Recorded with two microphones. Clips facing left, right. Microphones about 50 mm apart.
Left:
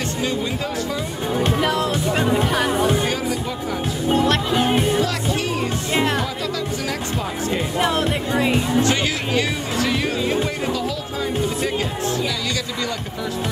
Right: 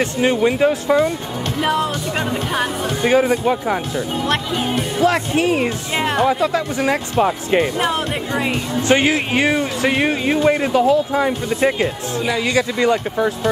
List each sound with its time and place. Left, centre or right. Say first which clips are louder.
0.0 s speech: right 7 dB; right
1.6 s speech: right 1 dB; centre
3.1 s speech: right 9 dB; right
4.1 s speech: left 4 dB; centre
4.6 s music: left 3 dB; centre
5.0 s speech: right 7 dB; right
7.8 s speech: even; centre
8.8 s speech: right 5 dB; right